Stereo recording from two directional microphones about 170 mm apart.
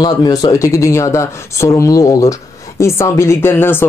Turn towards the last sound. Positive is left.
turn(degrees=15)  # may be behind; listen again after turning